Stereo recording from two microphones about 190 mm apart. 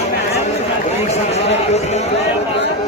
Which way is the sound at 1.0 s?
35° left (ahead or behind).